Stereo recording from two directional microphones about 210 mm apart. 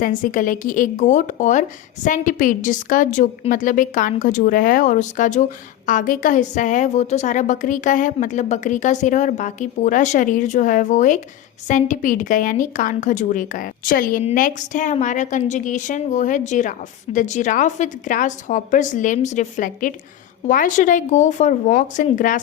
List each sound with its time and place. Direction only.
0.0 s a woman's voice: 40° left (ahead or behind)